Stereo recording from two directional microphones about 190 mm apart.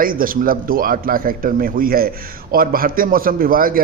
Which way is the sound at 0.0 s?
50° right (ahead or behind).